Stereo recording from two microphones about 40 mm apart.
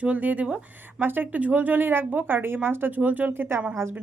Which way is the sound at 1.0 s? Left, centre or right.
Right.